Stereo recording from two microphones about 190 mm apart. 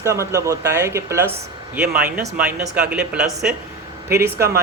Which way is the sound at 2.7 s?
5° right (ahead or behind).